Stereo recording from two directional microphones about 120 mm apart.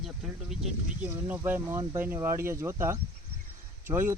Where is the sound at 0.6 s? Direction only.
10° right (ahead or behind).